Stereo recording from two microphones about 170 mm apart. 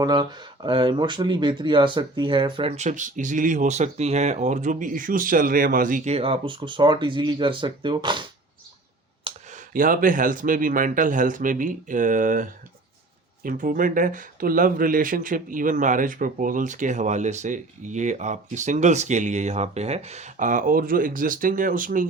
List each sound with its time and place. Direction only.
0.0 s speech: 25° right (ahead or behind); by 6.1 s 50° right (ahead or behind)
6.1 s speech: 35° right (ahead or behind)
9.3 s clicking: 35° right (ahead or behind)
9.7 s speech: 55° right (ahead or behind)